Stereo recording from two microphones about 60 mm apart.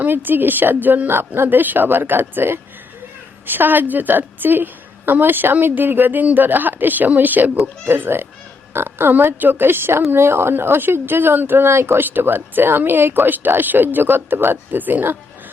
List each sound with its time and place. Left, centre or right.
0.0 s speech: right